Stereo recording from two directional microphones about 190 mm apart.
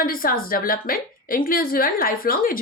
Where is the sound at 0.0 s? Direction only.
50° left (ahead or behind).